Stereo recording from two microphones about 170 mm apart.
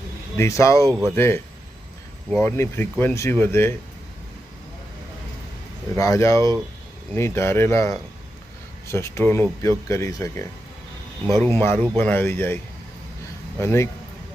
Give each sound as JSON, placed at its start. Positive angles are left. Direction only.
{"t": 0.3, "sound": "speech", "side_deg": 15}
{"t": 2.4, "sound": "speech", "side_deg": 15}
{"t": 6.0, "sound": "speech", "side_deg": 15}
{"t": 13.6, "sound": "speech", "side_deg": 15}